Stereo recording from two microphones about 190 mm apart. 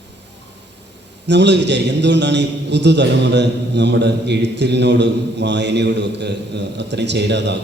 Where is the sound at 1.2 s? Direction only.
65° right (ahead or behind).